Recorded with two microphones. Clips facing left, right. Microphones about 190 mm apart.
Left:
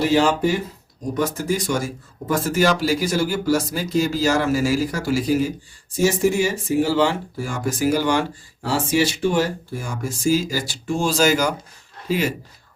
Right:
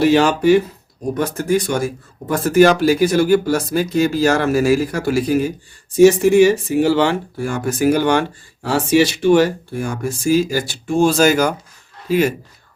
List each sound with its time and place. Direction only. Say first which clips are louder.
0.0 s speech: right 4 dB; 70° right (ahead or behind)
1.2 s speech: right 4 dB; 60° right (ahead or behind)